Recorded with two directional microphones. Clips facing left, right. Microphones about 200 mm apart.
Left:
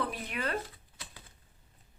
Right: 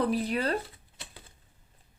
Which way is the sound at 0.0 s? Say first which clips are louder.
Right 8 dB; 35° right (ahead or behind).